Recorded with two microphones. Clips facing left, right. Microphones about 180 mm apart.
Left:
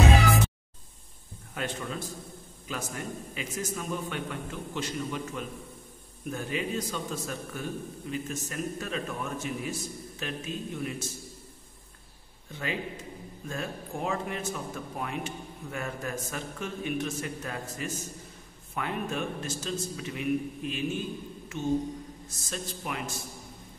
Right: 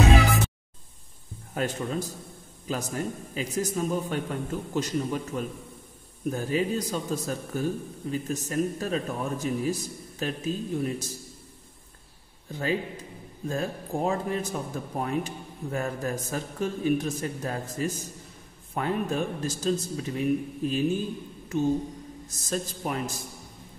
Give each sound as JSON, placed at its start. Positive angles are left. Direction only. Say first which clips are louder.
{"t": 1.5, "sound": "a man's voice", "louder": "right 5 dB", "side_deg": -40}
{"t": 12.4, "sound": "a man's voice", "louder": "right 5 dB", "side_deg": -35}